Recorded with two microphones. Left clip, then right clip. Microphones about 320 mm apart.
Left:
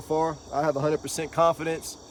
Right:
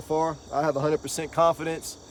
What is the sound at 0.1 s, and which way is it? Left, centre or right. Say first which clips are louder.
Cricket: even; centre.